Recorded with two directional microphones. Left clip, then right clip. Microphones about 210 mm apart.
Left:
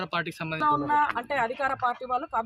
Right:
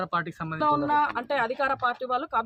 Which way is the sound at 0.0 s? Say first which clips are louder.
Right 1 dB; 40° right (ahead or behind).